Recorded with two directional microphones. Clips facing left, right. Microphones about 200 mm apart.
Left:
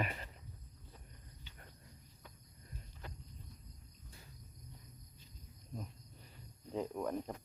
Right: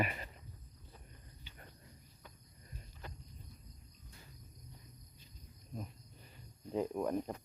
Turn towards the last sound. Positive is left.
turn(degrees=-10)  # may be behind; listen again after turning